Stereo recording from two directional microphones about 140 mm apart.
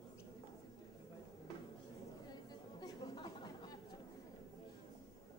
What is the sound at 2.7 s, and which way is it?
Chatter, 35° left (ahead or behind).